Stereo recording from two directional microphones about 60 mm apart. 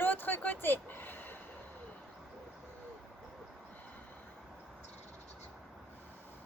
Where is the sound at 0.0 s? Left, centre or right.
Left.